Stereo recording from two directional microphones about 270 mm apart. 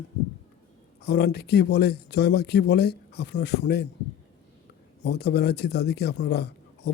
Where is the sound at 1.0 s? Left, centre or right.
Left.